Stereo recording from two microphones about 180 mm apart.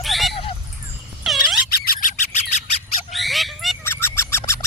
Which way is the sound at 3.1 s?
Centre (ahead or behind).